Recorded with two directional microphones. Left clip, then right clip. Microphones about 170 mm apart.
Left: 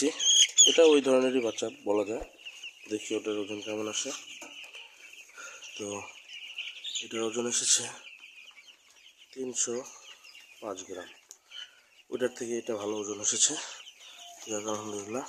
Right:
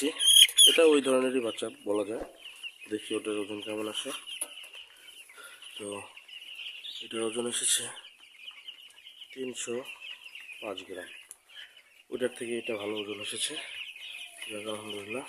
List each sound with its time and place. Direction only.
0.2 s rodents: 15° left (ahead or behind)
0.9 s speech: 5° left (ahead or behind)
5.4 s bird: centre (ahead or behind)
7.1 s speech: centre (ahead or behind)
9.3 s speech: 5° right (ahead or behind)
12.1 s speech: centre (ahead or behind); by 15.3 s 15° left (ahead or behind)